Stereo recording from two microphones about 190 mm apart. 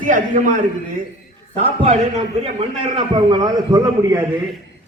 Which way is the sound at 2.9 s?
20° right (ahead or behind).